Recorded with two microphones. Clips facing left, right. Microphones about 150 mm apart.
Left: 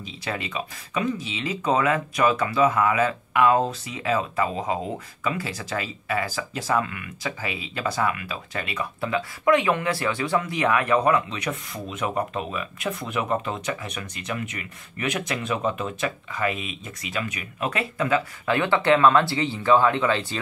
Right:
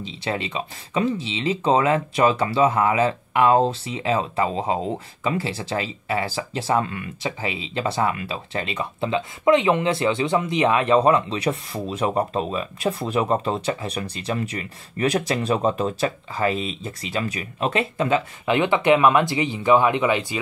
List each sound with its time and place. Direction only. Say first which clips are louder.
0.0 s speech: right 4 dB; 25° right (ahead or behind)